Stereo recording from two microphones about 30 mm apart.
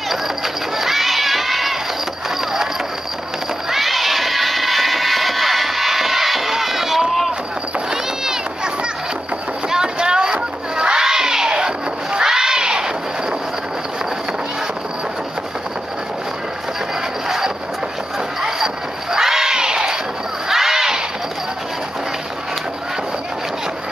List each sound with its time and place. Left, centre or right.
0.1 s crowd: centre
3.7 s crowd: centre
9.9 s a sound: right
11.0 s crowd: centre
19.1 s crowd: centre
20.4 s a sound: centre